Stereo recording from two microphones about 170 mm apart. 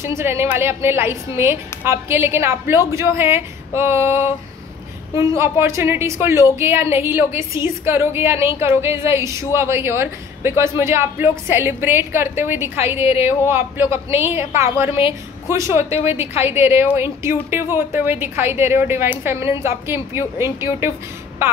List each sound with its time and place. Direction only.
0.0 s a woman's voice: 15° right (ahead or behind)